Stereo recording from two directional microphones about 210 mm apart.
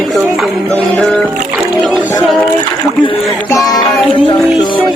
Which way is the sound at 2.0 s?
15° left (ahead or behind).